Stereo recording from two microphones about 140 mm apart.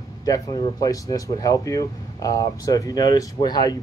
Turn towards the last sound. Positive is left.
turn(degrees=30)  # may be behind; listen again after turning